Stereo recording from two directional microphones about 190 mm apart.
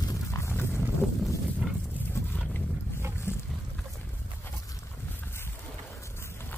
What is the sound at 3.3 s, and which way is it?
Boat, 15° left (ahead or behind).